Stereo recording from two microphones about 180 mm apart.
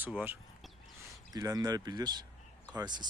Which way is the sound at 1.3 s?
20° right (ahead or behind).